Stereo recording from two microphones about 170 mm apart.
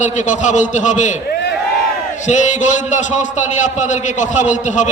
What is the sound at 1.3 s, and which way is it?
Crowd, 80° left.